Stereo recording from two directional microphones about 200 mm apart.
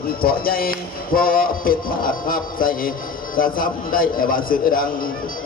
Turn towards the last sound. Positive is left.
turn(degrees=45)  # may be behind; listen again after turning